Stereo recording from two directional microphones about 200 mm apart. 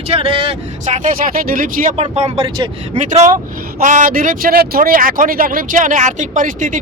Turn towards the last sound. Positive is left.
turn(degrees=-40)  # may be behind; listen again after turning